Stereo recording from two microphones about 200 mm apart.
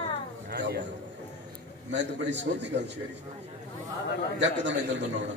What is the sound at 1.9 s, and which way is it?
A man's voice, 60° right (ahead or behind).